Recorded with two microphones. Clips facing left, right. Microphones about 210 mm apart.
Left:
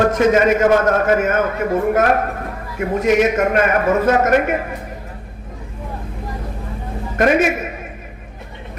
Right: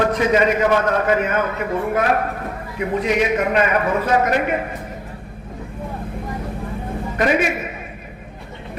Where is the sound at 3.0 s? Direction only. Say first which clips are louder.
Left 4 dB; 45° left (ahead or behind).